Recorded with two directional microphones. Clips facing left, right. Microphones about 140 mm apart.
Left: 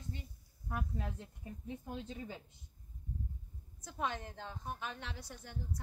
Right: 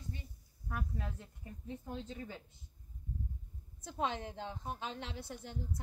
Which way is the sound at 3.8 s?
20° right (ahead or behind).